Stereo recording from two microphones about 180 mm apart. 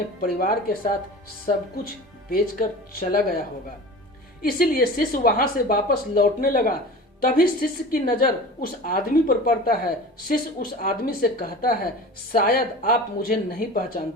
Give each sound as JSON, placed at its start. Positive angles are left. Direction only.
{"t": 0.2, "sound": "speech", "side_deg": 55}
{"t": 2.3, "sound": "speech", "side_deg": 50}
{"t": 4.4, "sound": "a woman's voice", "side_deg": 55}